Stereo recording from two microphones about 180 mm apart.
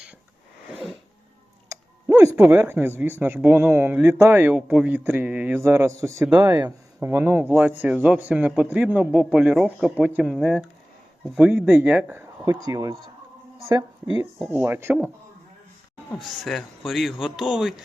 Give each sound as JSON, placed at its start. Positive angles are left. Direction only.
{"t": 0.7, "sound": "sneeze", "side_deg": 0}
{"t": 1.7, "sound": "speech", "side_deg": -15}
{"t": 12.5, "sound": "speech", "side_deg": -20}
{"t": 14.5, "sound": "speech", "side_deg": -10}
{"t": 16.1, "sound": "speech", "side_deg": 0}